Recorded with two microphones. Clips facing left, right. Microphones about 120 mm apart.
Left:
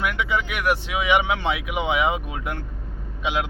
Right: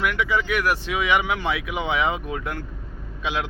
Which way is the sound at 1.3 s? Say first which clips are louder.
Left 1 dB; 30° left (ahead or behind).